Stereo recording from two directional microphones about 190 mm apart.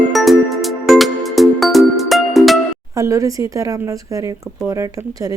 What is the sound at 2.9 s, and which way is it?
Speech, 15° right (ahead or behind).